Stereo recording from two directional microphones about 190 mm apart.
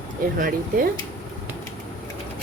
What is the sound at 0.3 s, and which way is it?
Speech, 45° right (ahead or behind).